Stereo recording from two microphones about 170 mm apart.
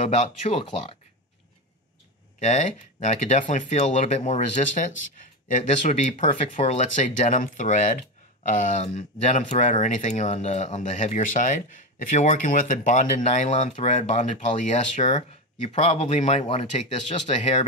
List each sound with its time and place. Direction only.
0.0 s speech: 40° left (ahead or behind)
2.4 s speech: 45° left (ahead or behind)